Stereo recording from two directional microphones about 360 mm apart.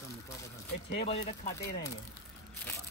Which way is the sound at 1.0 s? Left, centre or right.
Centre.